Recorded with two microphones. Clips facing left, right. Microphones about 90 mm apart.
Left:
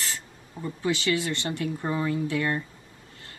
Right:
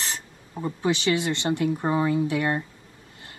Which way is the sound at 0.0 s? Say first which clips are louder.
Right 2 dB; 25° right (ahead or behind).